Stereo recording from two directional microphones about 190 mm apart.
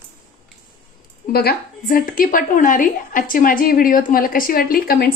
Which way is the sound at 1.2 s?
50° left (ahead or behind).